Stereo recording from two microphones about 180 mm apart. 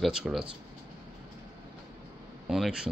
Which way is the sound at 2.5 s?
5° right (ahead or behind).